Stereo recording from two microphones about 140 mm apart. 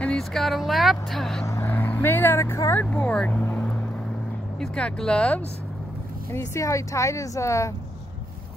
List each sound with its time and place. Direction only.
0.0 s speech: 5° left (ahead or behind)
1.5 s speech: 15° left (ahead or behind)
6.3 s speech: 20° left (ahead or behind)